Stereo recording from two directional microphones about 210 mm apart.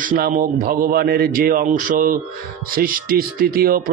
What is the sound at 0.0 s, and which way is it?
A man's voice, 40° right (ahead or behind).